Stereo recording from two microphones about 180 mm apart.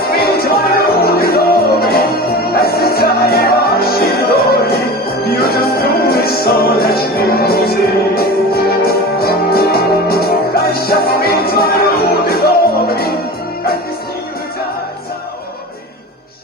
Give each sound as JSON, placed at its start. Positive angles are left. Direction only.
{"t": 0.1, "sound": "music", "side_deg": 60}